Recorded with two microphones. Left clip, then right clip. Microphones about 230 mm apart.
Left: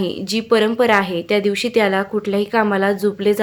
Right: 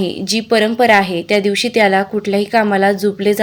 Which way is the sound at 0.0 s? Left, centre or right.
Centre.